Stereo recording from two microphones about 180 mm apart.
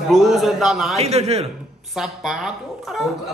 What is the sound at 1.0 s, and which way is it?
Speech, 35° right (ahead or behind).